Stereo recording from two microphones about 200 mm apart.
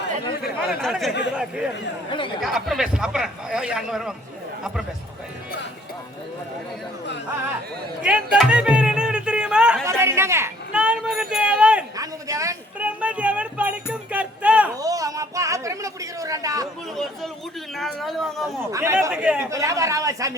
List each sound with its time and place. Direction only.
0.7 s speech: centre (ahead or behind)
2.0 s speech: 25° left (ahead or behind)
2.4 s speech: centre (ahead or behind)
8.0 s music: 5° right (ahead or behind)
11.9 s a sound: 15° right (ahead or behind)
14.8 s a sound: 15° right (ahead or behind)
17.7 s speech: centre (ahead or behind)
18.6 s speech: 15° right (ahead or behind)